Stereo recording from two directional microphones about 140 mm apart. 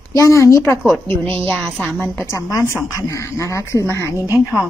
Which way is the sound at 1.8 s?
15° left (ahead or behind).